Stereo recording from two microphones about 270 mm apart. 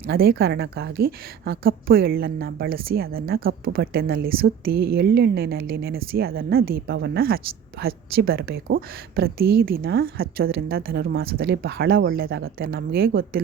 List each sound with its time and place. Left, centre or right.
0.0 s a woman's voice: right